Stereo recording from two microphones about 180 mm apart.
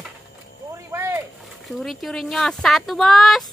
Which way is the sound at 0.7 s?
15° right (ahead or behind).